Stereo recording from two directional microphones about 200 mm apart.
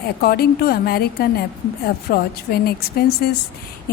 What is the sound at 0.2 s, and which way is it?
A woman's voice, 50° left (ahead or behind).